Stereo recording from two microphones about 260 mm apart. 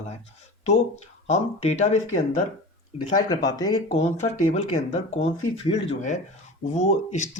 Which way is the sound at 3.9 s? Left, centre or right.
Left.